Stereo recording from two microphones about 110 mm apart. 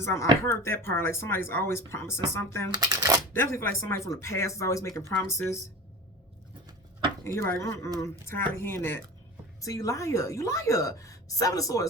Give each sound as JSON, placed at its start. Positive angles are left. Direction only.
{"t": 0.0, "sound": "a woman's voice", "side_deg": 25}
{"t": 2.7, "sound": "speech", "side_deg": -35}
{"t": 3.5, "sound": "a woman's voice", "side_deg": 20}
{"t": 7.3, "sound": "a woman's voice", "side_deg": 25}